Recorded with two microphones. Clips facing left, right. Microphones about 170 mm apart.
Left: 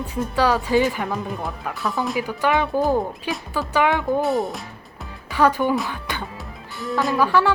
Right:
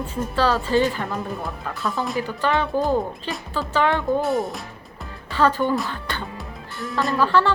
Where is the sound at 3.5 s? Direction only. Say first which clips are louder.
Left 1 dB; 10° left (ahead or behind).